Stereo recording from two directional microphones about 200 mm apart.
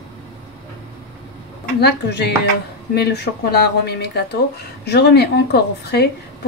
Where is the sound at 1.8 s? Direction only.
55° left (ahead or behind).